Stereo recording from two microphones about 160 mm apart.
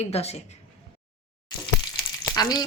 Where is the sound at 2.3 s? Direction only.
25° left (ahead or behind).